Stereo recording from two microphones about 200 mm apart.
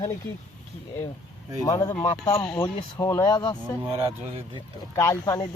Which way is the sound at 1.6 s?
15° left (ahead or behind).